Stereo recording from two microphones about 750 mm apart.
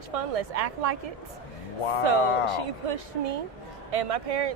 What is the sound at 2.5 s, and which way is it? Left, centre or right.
Speech, right.